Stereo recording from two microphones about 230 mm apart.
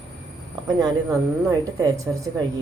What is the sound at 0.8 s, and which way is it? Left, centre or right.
Speech, centre.